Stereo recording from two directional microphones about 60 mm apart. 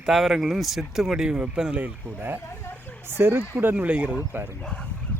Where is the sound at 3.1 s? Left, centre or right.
Right.